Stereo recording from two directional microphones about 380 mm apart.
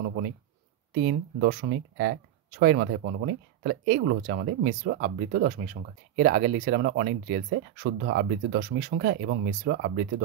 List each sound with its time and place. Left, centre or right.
0.9 s speech: right